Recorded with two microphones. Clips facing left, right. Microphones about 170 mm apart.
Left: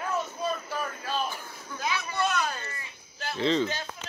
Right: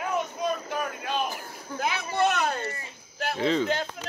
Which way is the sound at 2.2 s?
60° right (ahead or behind).